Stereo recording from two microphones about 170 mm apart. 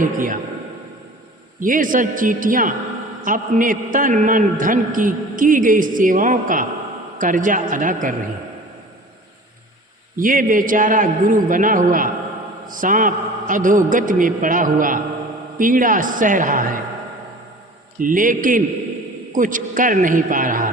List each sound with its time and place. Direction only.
0.0 s a man's voice: 50° right (ahead or behind)
1.6 s a man's voice: 50° right (ahead or behind)
10.2 s a man's voice: 50° right (ahead or behind)
18.0 s a man's voice: 50° right (ahead or behind)